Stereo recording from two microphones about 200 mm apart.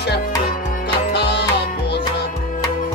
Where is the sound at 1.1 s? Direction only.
55° left (ahead or behind).